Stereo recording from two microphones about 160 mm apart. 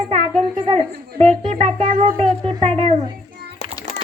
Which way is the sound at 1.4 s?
50° right (ahead or behind).